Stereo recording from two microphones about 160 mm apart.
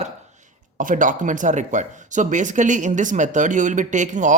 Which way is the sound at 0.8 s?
55° right (ahead or behind).